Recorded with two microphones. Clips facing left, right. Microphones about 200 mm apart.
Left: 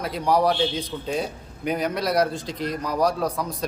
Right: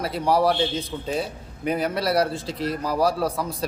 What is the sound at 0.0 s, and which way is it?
A man's voice, 5° right (ahead or behind).